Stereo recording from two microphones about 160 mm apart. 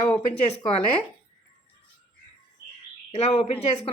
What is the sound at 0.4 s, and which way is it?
Speech, 40° left (ahead or behind).